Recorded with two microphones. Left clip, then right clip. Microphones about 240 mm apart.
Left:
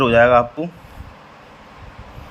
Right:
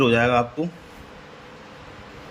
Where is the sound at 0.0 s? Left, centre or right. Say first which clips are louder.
Left 6 dB; centre.